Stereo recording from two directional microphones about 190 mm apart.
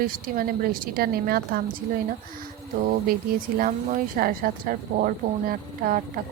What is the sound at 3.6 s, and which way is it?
Speech, 50° right (ahead or behind).